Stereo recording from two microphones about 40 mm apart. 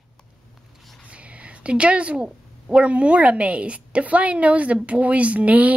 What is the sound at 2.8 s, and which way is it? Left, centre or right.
A woman's voice, right.